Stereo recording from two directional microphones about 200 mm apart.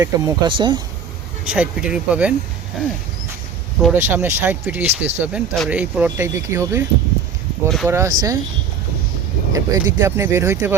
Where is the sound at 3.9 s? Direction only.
10° right (ahead or behind).